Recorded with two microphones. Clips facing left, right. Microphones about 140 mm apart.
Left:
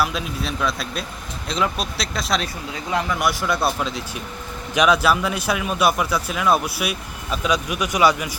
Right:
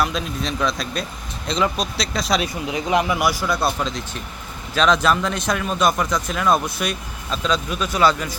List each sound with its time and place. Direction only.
0.0 s speech: 5° left (ahead or behind)
2.4 s speech: 20° right (ahead or behind)
3.2 s speech: centre (ahead or behind)